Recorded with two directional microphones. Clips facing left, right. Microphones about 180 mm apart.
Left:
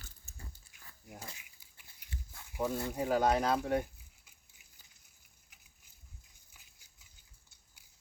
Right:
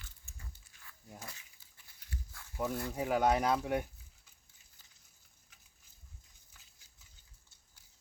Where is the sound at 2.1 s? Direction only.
20° left (ahead or behind).